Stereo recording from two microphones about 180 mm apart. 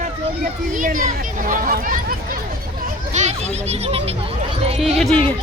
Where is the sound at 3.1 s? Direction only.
40° right (ahead or behind).